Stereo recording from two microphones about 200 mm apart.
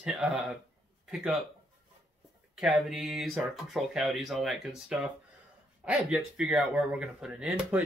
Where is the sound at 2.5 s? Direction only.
5° right (ahead or behind).